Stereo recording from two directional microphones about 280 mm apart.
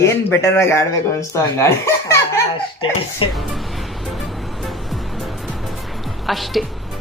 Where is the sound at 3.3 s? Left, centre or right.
Centre.